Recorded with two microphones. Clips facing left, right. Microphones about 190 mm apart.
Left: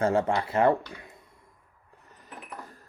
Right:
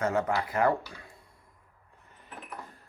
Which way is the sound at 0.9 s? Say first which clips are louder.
Left 4 dB; 20° left (ahead or behind).